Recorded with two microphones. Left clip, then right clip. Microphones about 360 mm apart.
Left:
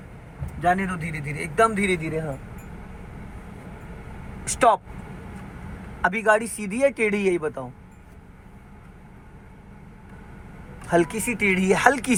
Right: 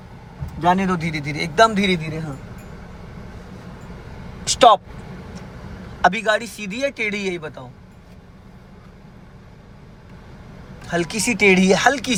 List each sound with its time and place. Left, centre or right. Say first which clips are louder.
0.6 s a man's voice: right 4 dB; centre
4.4 s speech: right 6 dB; right
6.0 s speech: right 2 dB; centre
10.8 s speech: left 2 dB; centre
11.3 s speech: right 12 dB; centre